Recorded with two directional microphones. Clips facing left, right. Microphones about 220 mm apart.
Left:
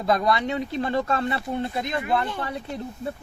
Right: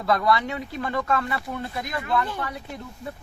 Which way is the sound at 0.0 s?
20° left (ahead or behind).